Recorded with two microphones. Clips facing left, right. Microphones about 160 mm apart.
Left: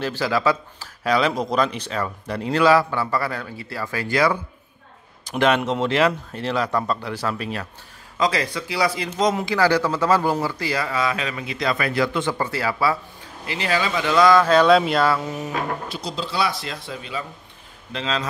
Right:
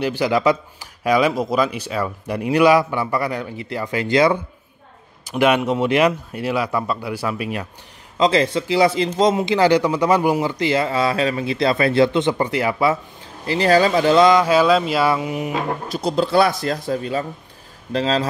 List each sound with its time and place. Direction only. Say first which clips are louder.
0.0 s speech: right 4 dB; 15° right (ahead or behind)
5.4 s speech: right 3 dB; 10° right (ahead or behind)
8.2 s speech: right 6 dB; 25° right (ahead or behind)
13.5 s speech: right 8 dB; 40° right (ahead or behind)
14.2 s speech: right 1 dB; 15° right (ahead or behind)
15.0 s speech: right 3 dB; 15° right (ahead or behind)
15.9 s speech: right 10 dB; 55° right (ahead or behind); by 18.3 s 35° right (ahead or behind)